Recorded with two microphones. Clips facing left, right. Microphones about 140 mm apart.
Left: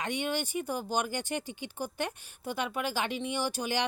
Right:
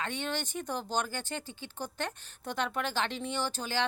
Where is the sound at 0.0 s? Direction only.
15° left (ahead or behind).